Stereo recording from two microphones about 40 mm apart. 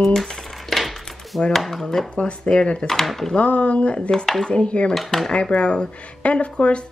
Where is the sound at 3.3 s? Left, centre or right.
Left.